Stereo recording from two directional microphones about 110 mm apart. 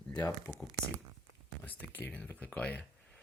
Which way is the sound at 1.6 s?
15° left (ahead or behind).